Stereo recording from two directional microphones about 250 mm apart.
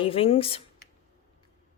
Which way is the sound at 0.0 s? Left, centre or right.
Left.